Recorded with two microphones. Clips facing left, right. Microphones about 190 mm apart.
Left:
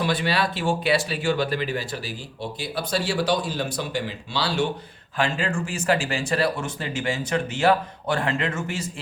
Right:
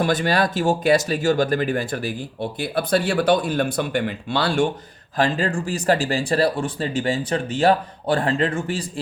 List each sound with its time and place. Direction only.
0.0 s speech: 45° right (ahead or behind)
5.1 s speech: 40° right (ahead or behind)